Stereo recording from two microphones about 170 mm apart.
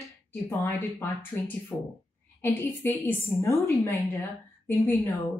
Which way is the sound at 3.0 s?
15° left (ahead or behind).